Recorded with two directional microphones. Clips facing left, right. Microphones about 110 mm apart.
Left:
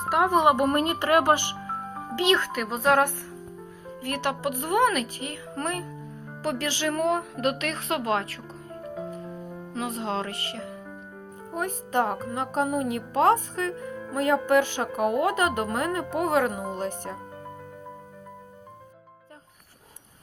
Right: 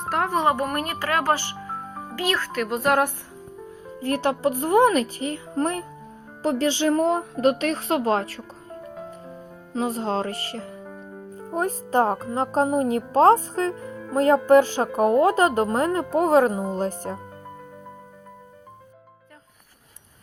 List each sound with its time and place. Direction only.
0.0 s speech: 10° left (ahead or behind); by 2.5 s 25° left (ahead or behind)
2.5 s speech: centre (ahead or behind)
4.0 s speech: 30° right (ahead or behind)
9.7 s speech: 35° right (ahead or behind)